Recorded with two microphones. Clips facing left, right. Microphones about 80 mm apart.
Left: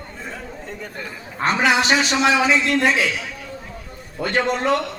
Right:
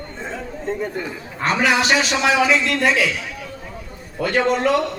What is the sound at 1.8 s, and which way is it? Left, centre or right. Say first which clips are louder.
A man's voice: even; centre.